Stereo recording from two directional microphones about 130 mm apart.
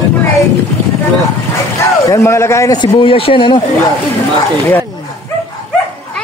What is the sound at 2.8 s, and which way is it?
Speech, 40° left (ahead or behind).